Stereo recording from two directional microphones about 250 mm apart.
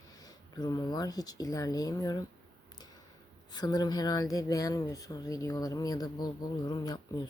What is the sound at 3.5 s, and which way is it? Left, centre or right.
Speech, centre.